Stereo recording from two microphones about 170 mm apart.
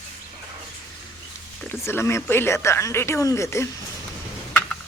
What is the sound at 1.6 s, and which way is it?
Speech, 15° left (ahead or behind).